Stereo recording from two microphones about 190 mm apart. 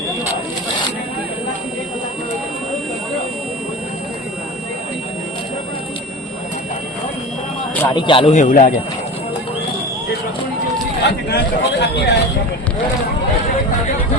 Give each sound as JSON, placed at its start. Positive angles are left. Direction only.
{"t": 7.9, "sound": "speech", "side_deg": 25}
{"t": 8.4, "sound": "a man's voice", "side_deg": 45}
{"t": 11.0, "sound": "a man's voice", "side_deg": 60}